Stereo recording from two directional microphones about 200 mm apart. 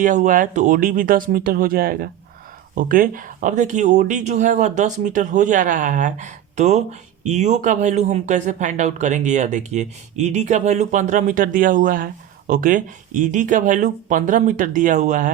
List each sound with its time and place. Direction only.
0.0 s speech: 40° right (ahead or behind)